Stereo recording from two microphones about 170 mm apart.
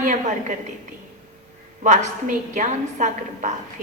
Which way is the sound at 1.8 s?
45° right (ahead or behind).